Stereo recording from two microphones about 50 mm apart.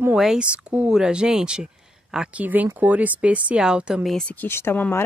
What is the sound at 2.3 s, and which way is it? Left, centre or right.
Speech, right.